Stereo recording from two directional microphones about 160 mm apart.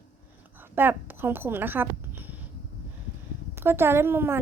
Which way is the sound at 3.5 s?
15° right (ahead or behind).